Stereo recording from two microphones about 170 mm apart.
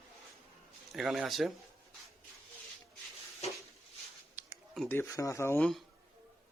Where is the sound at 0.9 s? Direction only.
Centre (ahead or behind).